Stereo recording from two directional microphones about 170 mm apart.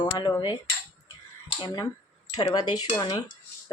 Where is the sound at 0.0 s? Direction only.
25° left (ahead or behind).